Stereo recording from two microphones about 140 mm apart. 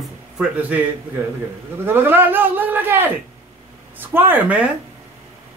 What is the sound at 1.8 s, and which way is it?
Speech, 15° right (ahead or behind).